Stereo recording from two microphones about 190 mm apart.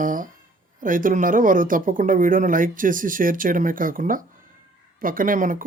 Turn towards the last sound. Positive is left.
turn(degrees=-45)  # may be behind; listen again after turning